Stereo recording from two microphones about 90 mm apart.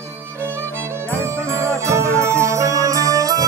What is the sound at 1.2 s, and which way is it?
Music, 30° right (ahead or behind).